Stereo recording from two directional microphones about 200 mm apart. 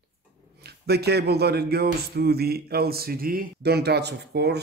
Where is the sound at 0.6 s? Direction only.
55° right (ahead or behind).